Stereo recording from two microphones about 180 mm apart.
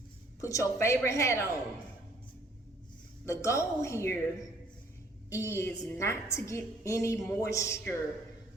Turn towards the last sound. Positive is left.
turn(degrees=15)  # may be behind; listen again after turning